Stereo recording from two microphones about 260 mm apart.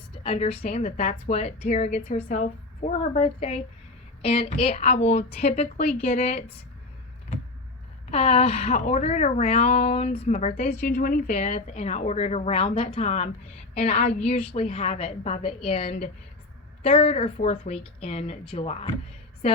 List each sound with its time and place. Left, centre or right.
0.2 s a woman's voice: left
8.1 s a woman's voice: left